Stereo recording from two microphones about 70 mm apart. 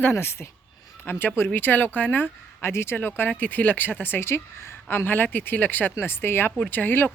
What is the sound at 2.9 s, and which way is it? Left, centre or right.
Speech, left.